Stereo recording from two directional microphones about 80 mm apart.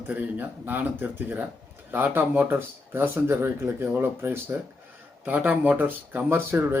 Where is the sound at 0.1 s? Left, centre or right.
Right.